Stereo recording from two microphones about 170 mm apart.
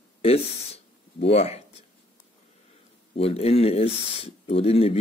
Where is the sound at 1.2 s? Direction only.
35° left (ahead or behind).